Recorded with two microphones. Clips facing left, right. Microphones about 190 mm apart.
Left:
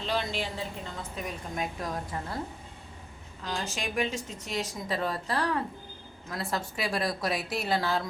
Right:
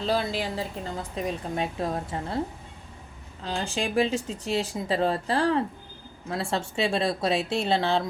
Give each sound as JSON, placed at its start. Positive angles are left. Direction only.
{"t": 0.0, "sound": "a woman's voice", "side_deg": -35}
{"t": 3.4, "sound": "a woman's voice", "side_deg": -30}